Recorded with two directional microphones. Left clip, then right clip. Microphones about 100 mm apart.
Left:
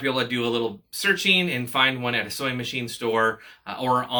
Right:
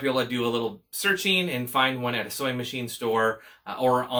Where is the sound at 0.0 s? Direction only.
35° right (ahead or behind).